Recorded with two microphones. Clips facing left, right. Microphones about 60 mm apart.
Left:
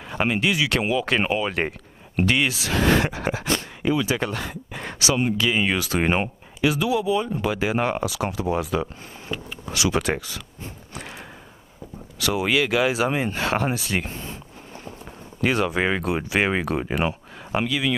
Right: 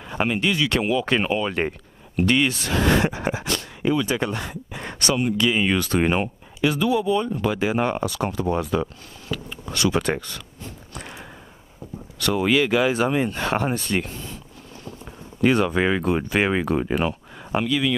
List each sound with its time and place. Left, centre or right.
0.1 s speech: centre
3.8 s speech: centre
4.2 s speech: centre
9.3 s speech: left
9.7 s speech: centre
11.0 s a sound: centre
12.2 s speech: centre
14.0 s a sound: left
15.4 s speech: centre